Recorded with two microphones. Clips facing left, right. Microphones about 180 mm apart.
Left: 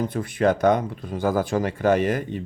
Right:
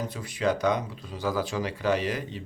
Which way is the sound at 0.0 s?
55° left (ahead or behind).